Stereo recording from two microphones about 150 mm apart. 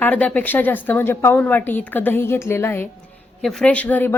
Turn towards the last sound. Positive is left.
turn(degrees=10)  # may be behind; listen again after turning